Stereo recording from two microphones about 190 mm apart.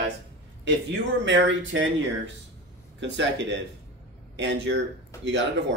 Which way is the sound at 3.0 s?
70° right (ahead or behind).